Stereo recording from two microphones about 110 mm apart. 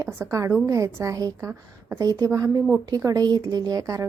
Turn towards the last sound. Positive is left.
turn(degrees=-30)  # may be behind; listen again after turning